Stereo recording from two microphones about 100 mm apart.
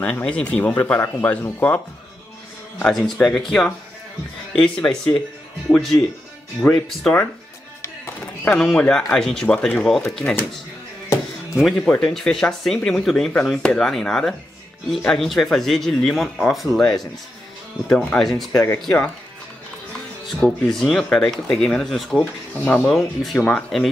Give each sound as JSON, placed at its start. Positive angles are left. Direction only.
{"t": 0.0, "sound": "speech", "side_deg": 10}
{"t": 2.8, "sound": "speech", "side_deg": 5}
{"t": 8.5, "sound": "speech", "side_deg": 10}
{"t": 11.5, "sound": "speech", "side_deg": 0}
{"t": 18.5, "sound": "speech", "side_deg": 30}
{"t": 20.3, "sound": "speech", "side_deg": 5}
{"t": 22.2, "sound": "speech", "side_deg": 15}
{"t": 22.8, "sound": "speech", "side_deg": 5}